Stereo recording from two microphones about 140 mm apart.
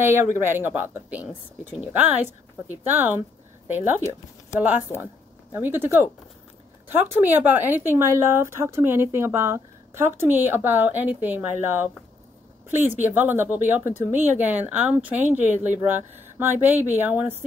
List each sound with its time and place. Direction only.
0.0 s speech: 20° right (ahead or behind)
5.0 s speech: 15° right (ahead or behind)
16.6 s speech: 15° right (ahead or behind)